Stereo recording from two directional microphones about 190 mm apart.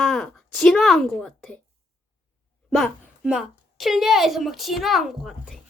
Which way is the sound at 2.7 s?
Centre (ahead or behind).